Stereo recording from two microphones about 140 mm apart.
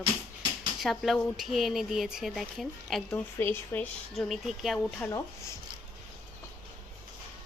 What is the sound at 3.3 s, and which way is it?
Speech, 15° left (ahead or behind).